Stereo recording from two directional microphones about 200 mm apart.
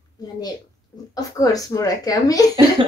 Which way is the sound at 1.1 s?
15° left (ahead or behind).